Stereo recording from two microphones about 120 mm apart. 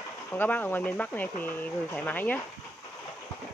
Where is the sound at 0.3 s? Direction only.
15° left (ahead or behind).